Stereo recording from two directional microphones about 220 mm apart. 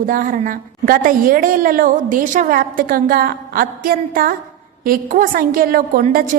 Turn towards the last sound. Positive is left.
turn(degrees=-40)  # may be behind; listen again after turning